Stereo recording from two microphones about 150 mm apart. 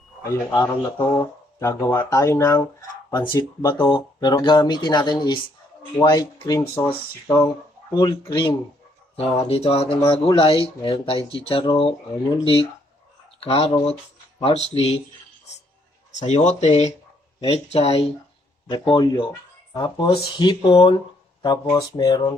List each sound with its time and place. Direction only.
0.3 s speech: 20° left (ahead or behind)
3.1 s speech: 30° left (ahead or behind)
3.8 s speech: 30° left (ahead or behind)
9.1 s speech: 45° left (ahead or behind)
13.4 s speech: 40° left (ahead or behind)
16.1 s speech: 50° left (ahead or behind)
18.7 s speech: 30° left (ahead or behind)
19.1 s a sound: 15° left (ahead or behind)
19.8 s speech: 30° left (ahead or behind)
20.7 s speech: 40° left (ahead or behind)
21.4 s speech: 25° left (ahead or behind)